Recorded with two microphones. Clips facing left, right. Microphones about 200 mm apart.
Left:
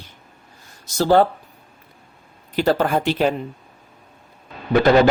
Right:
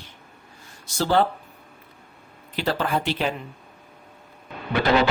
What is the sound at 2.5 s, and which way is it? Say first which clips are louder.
Speech: left 6 dB; 45° left (ahead or behind).